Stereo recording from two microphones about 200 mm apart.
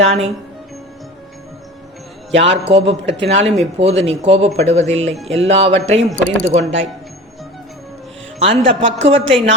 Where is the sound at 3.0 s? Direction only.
60° right (ahead or behind).